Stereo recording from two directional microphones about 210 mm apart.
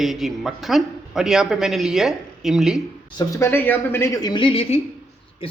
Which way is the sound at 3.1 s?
15° left (ahead or behind).